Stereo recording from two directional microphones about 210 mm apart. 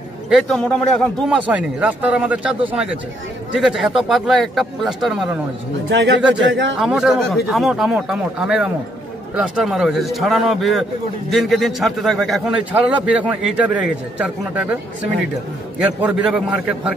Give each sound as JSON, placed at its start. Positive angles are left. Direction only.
{"t": 0.3, "sound": "a man's voice", "side_deg": 0}
{"t": 5.9, "sound": "speech", "side_deg": -60}
{"t": 6.8, "sound": "a man's voice", "side_deg": 0}
{"t": 15.8, "sound": "a man's voice", "side_deg": -5}